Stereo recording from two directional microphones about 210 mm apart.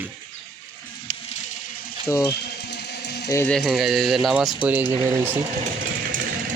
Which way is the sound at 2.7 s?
55° left (ahead or behind).